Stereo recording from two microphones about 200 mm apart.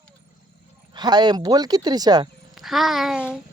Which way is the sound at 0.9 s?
20° right (ahead or behind).